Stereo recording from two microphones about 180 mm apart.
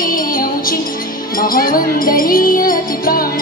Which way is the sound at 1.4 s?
50° left (ahead or behind).